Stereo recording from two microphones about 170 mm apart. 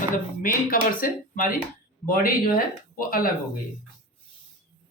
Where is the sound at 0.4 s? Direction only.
60° left (ahead or behind).